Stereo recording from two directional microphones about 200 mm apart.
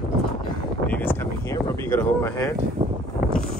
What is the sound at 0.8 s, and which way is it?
Speech, 10° left (ahead or behind).